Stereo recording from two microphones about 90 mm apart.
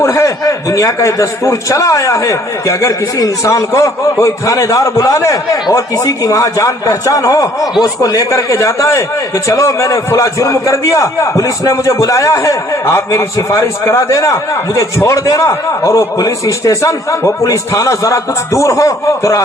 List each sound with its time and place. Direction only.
0.0 s a man's voice: 30° left (ahead or behind)